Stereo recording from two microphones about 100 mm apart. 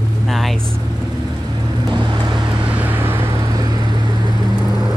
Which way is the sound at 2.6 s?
15° right (ahead or behind).